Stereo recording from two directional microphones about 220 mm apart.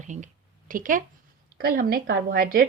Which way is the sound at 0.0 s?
35° right (ahead or behind).